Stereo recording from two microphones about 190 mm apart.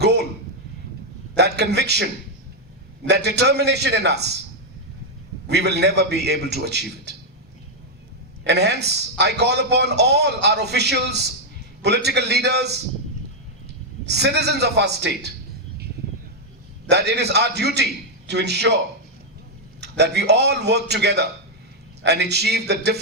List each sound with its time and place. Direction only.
0.0 s a sound: 60° right (ahead or behind)
1.4 s a man's voice: 60° right (ahead or behind)
3.1 s a man's voice: 60° right (ahead or behind)
5.5 s a man's voice: 60° right (ahead or behind)
8.4 s a man's voice: 60° right (ahead or behind)
14.0 s a man's voice: 60° right (ahead or behind)
16.9 s a man's voice: 60° right (ahead or behind)
19.8 s a man's voice: 60° right (ahead or behind)